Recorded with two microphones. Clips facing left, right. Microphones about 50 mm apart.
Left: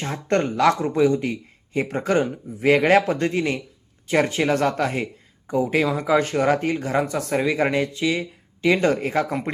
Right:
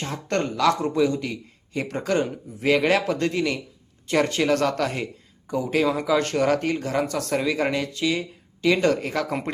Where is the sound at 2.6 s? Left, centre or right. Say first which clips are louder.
Left 4 dB; left.